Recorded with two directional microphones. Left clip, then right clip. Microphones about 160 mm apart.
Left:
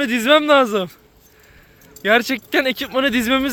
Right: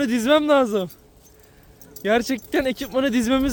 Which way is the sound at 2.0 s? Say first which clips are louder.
Left 5 dB; 10° right (ahead or behind).